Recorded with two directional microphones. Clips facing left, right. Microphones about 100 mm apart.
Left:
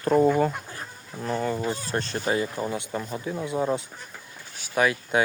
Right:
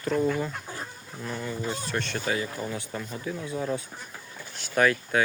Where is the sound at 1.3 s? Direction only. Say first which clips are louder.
Left 7 dB; 50° left (ahead or behind).